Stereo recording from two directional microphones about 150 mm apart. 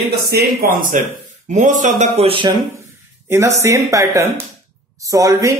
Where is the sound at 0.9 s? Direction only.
60° right (ahead or behind); by 2.5 s 40° right (ahead or behind).